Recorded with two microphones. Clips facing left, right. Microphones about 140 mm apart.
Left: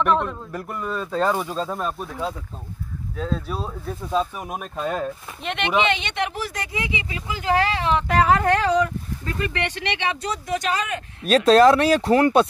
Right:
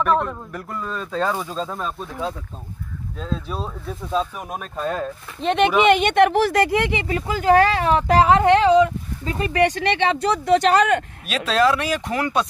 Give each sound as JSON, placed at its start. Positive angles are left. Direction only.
{"t": 0.1, "sound": "speech", "side_deg": -15}
{"t": 0.5, "sound": "speech", "side_deg": 15}
{"t": 3.2, "sound": "speech", "side_deg": 5}
{"t": 5.4, "sound": "speech", "side_deg": -35}
{"t": 5.9, "sound": "speech", "side_deg": -50}
{"t": 7.2, "sound": "speech", "side_deg": -40}
{"t": 9.5, "sound": "speech", "side_deg": -40}
{"t": 11.2, "sound": "speech", "side_deg": 40}